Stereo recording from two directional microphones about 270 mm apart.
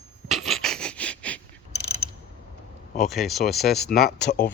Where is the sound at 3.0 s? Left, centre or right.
Centre.